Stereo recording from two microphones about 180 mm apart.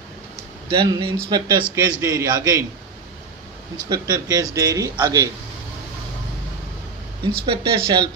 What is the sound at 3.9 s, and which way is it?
A man's voice, 20° right (ahead or behind).